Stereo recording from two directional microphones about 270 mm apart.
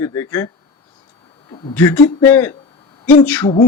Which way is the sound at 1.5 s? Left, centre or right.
Centre.